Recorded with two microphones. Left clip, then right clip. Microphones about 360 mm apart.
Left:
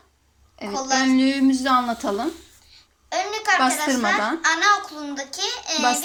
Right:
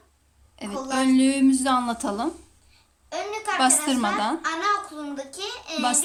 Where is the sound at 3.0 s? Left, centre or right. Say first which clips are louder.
Left 6 dB; centre.